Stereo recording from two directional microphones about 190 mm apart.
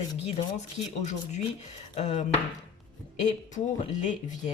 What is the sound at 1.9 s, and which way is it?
Speech, 35° left (ahead or behind).